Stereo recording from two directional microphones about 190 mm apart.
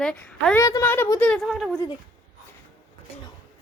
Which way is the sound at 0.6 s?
15° left (ahead or behind).